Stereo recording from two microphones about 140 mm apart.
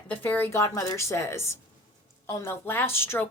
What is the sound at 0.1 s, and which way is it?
A woman's voice, 10° left (ahead or behind).